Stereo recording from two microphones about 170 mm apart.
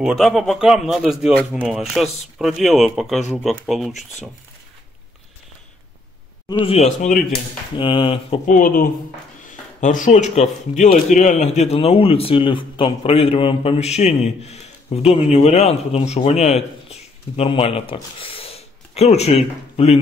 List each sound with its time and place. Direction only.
0.0 s a man's voice: centre (ahead or behind)
7.7 s speech: 30° left (ahead or behind)
8.5 s speech: 55° left (ahead or behind); by 20.0 s 40° left (ahead or behind)